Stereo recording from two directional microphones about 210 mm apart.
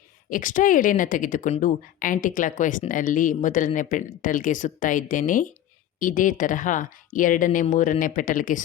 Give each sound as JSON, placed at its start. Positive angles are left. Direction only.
{"t": 0.3, "sound": "speech", "side_deg": 40}